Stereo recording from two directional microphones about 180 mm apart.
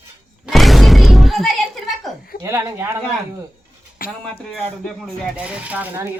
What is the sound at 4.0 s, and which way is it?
Speech, 55° left (ahead or behind).